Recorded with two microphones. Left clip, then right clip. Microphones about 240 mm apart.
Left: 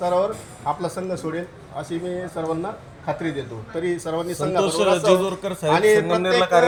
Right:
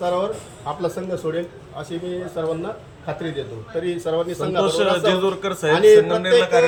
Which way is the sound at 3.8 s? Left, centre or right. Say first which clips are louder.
Right 2 dB; centre.